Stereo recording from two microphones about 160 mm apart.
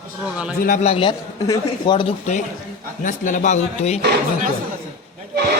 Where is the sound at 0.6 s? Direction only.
55° left (ahead or behind).